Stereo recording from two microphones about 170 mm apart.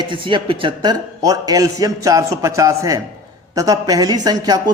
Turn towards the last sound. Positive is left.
turn(degrees=-25)  # may be behind; listen again after turning